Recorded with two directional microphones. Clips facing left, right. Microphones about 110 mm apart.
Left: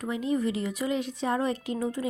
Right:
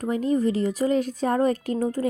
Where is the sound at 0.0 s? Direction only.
40° right (ahead or behind).